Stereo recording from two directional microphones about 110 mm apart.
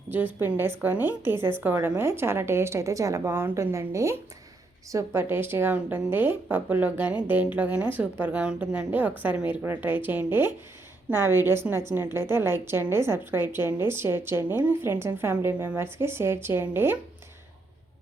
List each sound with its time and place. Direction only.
0.1 s a woman's voice: 15° right (ahead or behind)